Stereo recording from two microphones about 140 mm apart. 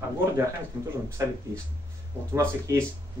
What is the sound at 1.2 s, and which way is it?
A man's voice, 25° right (ahead or behind).